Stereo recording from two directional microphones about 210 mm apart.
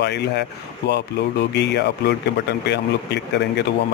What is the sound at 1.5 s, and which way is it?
A man's voice, 55° left (ahead or behind).